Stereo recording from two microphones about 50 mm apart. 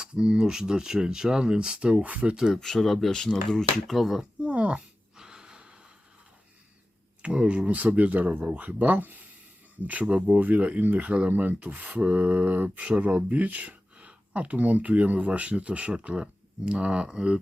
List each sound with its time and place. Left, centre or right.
0.0 s speech: centre
2.6 s speech: centre
4.4 s speech: right
5.1 s gasp: centre
7.2 s speech: right